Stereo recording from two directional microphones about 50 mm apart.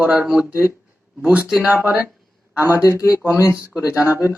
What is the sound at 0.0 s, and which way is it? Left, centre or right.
Speech, right.